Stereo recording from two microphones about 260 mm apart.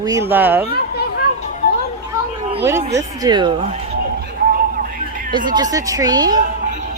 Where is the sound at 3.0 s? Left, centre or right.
Centre.